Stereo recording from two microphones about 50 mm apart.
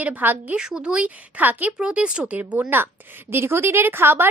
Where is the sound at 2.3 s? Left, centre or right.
Right.